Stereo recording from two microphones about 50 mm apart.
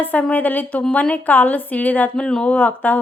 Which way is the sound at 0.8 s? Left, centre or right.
Left.